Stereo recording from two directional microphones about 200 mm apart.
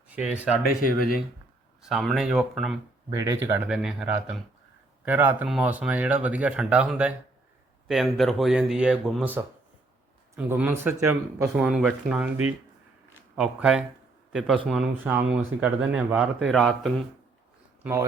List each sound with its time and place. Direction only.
0.2 s speech: 5° right (ahead or behind)
0.9 s speech: 45° left (ahead or behind)
1.8 s speech: centre (ahead or behind)
3.1 s speech: 15° right (ahead or behind)
3.7 s speech: centre (ahead or behind)
13.3 s speech: 5° right (ahead or behind)